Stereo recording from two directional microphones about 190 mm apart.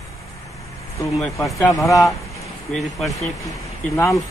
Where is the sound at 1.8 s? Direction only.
15° left (ahead or behind).